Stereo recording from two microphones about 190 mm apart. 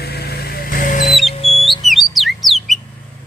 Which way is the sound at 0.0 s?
55° left (ahead or behind).